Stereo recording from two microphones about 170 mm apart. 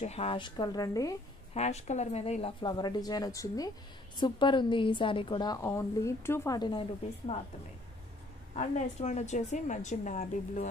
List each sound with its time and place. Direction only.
0.0 s a woman's voice: 40° left (ahead or behind); by 1.1 s 20° left (ahead or behind)
1.5 s speech: 40° left (ahead or behind)
2.6 s a woman's voice: 25° left (ahead or behind)
8.5 s a woman's voice: 45° left (ahead or behind)